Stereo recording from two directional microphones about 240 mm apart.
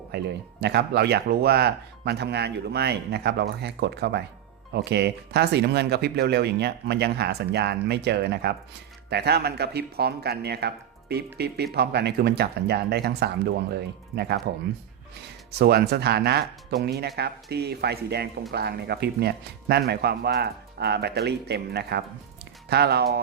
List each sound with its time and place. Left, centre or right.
0.6 s speech: right
15.5 s speech: right